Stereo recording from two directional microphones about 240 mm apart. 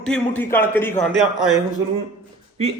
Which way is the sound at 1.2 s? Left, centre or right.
Centre.